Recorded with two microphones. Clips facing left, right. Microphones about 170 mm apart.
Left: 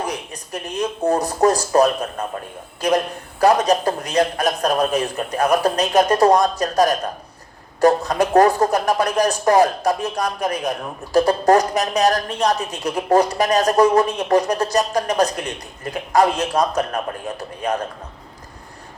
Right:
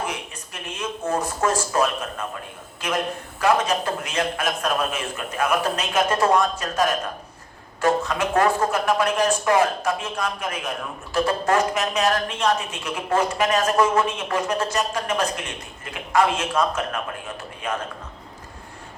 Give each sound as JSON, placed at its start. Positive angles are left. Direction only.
{"t": 0.0, "sound": "speech", "side_deg": 35}